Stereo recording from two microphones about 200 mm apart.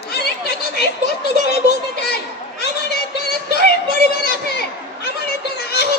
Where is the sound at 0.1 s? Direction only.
50° left (ahead or behind).